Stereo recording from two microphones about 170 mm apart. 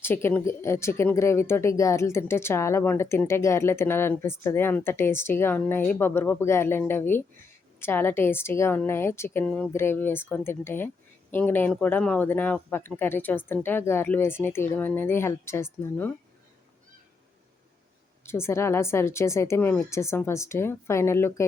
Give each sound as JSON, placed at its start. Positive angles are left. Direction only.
{"t": 0.0, "sound": "speech", "side_deg": 15}
{"t": 18.3, "sound": "speech", "side_deg": 15}